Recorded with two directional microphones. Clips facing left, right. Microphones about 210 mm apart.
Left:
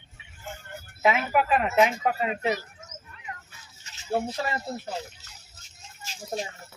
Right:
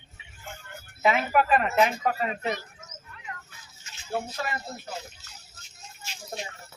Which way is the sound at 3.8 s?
30° left (ahead or behind).